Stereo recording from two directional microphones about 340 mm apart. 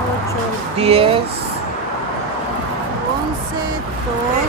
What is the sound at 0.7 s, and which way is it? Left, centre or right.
Speech, centre.